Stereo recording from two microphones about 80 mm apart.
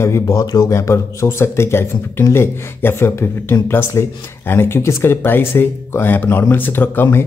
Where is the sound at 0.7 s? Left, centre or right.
Left.